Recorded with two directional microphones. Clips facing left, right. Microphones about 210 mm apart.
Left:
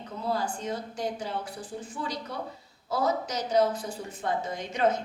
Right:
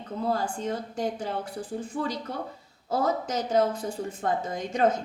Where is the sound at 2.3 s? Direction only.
50° right (ahead or behind).